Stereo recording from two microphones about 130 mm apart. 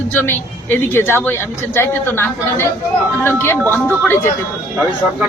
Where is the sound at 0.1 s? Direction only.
15° left (ahead or behind).